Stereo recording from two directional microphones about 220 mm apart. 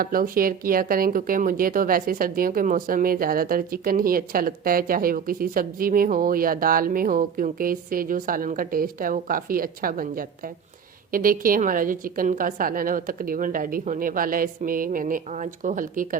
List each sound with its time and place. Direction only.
0.0 s speech: 40° right (ahead or behind)